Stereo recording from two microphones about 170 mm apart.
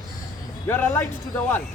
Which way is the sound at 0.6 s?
15° left (ahead or behind).